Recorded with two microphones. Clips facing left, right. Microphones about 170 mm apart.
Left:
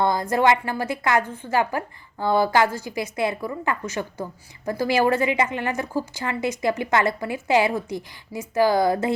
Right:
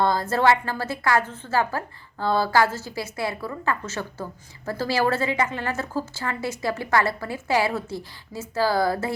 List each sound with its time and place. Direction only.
0.0 s a woman's voice: 15° left (ahead or behind)